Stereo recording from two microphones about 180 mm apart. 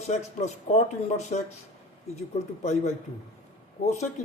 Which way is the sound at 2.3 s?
40° left (ahead or behind).